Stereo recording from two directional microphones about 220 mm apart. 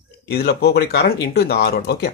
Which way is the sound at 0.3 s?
45° left (ahead or behind).